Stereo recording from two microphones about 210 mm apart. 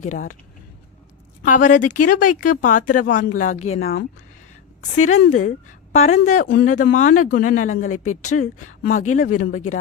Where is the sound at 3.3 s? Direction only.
35° left (ahead or behind).